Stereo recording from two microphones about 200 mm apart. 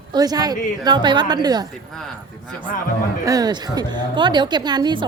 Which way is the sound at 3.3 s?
20° right (ahead or behind).